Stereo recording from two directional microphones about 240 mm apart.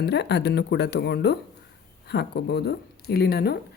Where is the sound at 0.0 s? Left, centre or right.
Left.